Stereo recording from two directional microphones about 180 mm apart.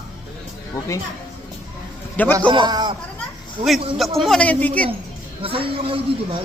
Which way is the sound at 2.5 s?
25° right (ahead or behind).